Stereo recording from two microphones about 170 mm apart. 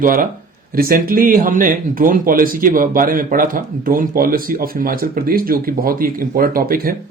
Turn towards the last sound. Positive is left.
turn(degrees=-60)  # may be behind; listen again after turning